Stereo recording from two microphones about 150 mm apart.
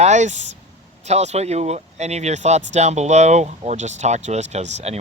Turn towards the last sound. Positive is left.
turn(degrees=-45)  # may be behind; listen again after turning